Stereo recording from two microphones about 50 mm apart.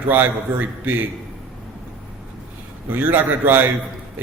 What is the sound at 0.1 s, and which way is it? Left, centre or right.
Speech, right.